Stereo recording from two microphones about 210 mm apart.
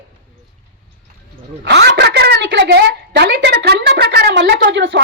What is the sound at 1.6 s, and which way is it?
A woman's voice, 55° right (ahead or behind).